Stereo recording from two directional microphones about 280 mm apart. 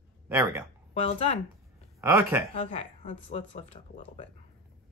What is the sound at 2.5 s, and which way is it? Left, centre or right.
Speech, left.